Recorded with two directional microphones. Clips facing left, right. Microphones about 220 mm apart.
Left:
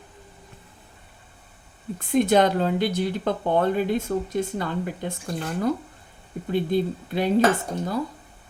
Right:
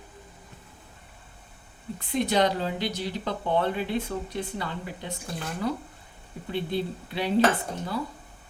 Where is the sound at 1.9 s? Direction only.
50° left (ahead or behind).